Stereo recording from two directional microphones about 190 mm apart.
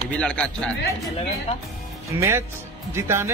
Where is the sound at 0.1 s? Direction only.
5° left (ahead or behind).